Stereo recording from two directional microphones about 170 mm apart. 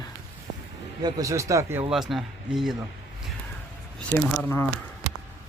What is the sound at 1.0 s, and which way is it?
Speech, 20° right (ahead or behind).